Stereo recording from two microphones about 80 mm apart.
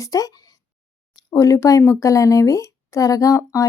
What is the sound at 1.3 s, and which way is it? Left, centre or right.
Speech, left.